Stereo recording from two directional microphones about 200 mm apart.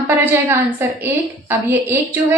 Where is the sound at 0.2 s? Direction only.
10° right (ahead or behind).